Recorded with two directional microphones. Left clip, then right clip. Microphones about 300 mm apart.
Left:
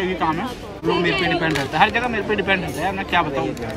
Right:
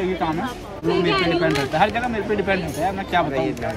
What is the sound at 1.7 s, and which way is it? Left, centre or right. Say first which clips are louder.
Speech: left 2 dB; centre.